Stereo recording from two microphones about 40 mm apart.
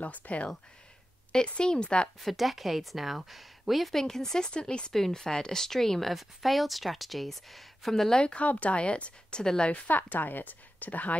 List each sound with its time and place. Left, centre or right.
0.0 s speech: left
1.3 s speech: left
2.1 s speech: centre
4.0 s speech: centre
4.5 s speech: left
4.9 s speech: centre
8.2 s speech: left
9.4 s speech: centre
9.8 s a woman's voice: left